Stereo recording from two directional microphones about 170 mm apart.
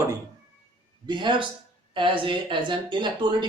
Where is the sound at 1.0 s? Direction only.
25° right (ahead or behind).